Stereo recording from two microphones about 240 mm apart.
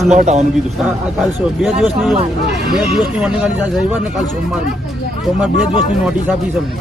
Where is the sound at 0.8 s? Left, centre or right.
Centre.